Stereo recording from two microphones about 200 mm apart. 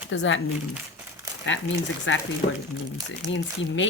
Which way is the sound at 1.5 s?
70° left (ahead or behind).